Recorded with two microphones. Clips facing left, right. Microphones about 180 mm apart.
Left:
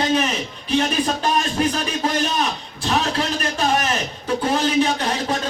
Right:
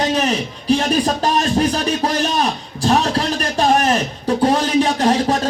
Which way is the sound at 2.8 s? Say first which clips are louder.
Right 5 dB; 40° right (ahead or behind).